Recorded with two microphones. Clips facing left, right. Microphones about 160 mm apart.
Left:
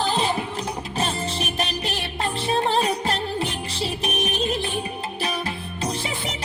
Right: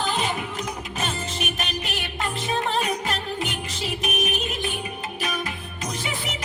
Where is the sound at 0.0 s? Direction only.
30° left (ahead or behind).